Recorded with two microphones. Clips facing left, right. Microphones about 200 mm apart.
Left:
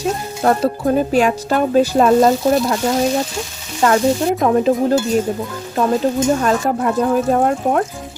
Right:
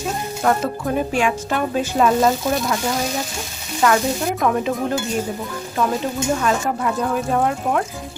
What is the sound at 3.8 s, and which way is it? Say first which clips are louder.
Speech: left 4 dB; 30° left (ahead or behind).